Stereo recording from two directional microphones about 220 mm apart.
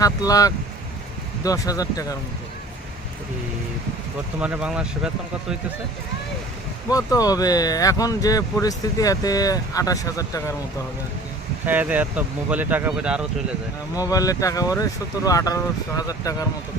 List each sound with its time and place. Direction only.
0.0 s speech: 15° left (ahead or behind)
4.4 s speech: 5° right (ahead or behind)
6.9 s speech: 15° left (ahead or behind)
11.6 s speech: 10° right (ahead or behind)
13.9 s speech: 15° left (ahead or behind)